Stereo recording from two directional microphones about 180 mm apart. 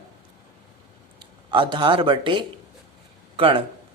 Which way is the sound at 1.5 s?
25° right (ahead or behind).